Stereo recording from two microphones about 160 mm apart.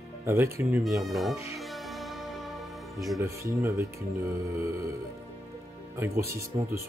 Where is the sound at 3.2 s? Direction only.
20° right (ahead or behind).